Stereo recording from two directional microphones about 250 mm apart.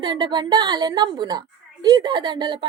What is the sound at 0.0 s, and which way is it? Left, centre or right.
A woman's voice, centre.